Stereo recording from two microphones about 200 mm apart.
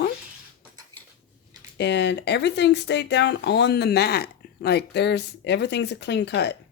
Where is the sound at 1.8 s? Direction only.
60° left (ahead or behind).